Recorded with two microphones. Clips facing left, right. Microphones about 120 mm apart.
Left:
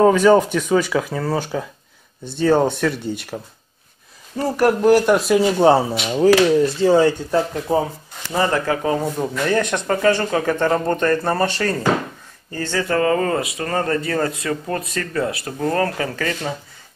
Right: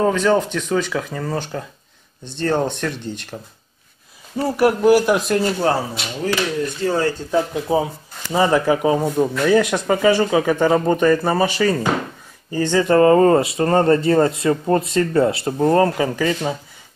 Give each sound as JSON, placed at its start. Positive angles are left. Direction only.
{"t": 0.0, "sound": "speech", "side_deg": 10}
{"t": 4.4, "sound": "speech", "side_deg": -10}
{"t": 5.6, "sound": "speech", "side_deg": 25}
{"t": 7.2, "sound": "speech", "side_deg": -5}
{"t": 12.5, "sound": "speech", "side_deg": -20}